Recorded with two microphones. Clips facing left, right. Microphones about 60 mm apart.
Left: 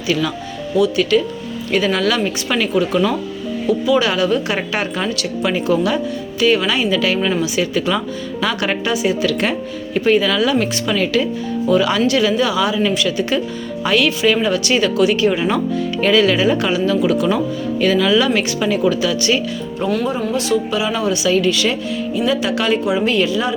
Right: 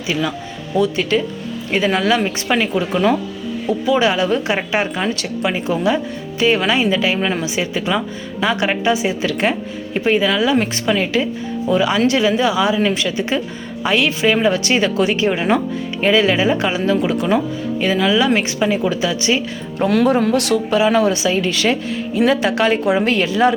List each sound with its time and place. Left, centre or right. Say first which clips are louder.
0.1 s speech: left 2 dB; centre
0.8 s speech: left 2 dB; right
19.9 s speech: right 5 dB; right
20.7 s speech: right 4 dB; right